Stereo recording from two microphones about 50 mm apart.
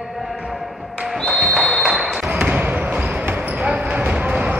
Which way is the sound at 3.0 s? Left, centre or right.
Centre.